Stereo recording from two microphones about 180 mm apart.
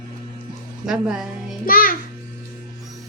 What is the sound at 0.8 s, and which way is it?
Speech, 5° right (ahead or behind).